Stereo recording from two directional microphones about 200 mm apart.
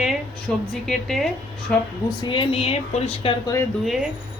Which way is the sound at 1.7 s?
5° left (ahead or behind).